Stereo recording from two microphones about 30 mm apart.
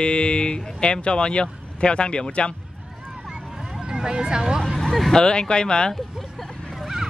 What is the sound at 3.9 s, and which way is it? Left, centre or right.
Speech, right.